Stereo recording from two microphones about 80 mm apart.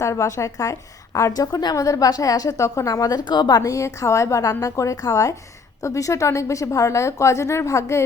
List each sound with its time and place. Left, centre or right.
0.0 s a woman's voice: left
3.2 s a woman's voice: left